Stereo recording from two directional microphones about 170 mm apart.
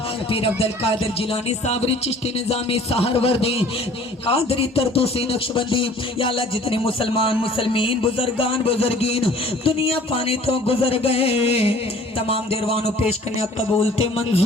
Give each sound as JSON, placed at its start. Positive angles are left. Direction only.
{"t": 0.3, "sound": "a man's voice", "side_deg": 35}